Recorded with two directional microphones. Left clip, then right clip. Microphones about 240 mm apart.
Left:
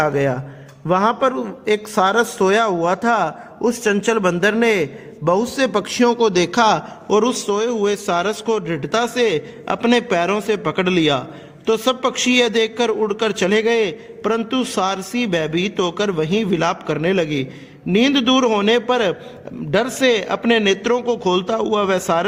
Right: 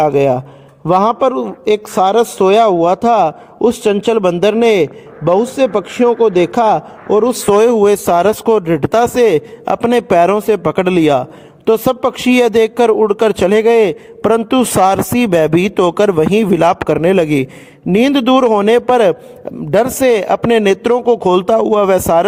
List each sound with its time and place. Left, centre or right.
0.0 s speech: right